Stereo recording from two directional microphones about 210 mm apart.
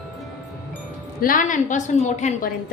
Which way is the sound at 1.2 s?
40° left (ahead or behind).